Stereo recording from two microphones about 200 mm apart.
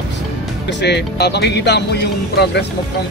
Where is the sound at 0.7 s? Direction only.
60° left (ahead or behind).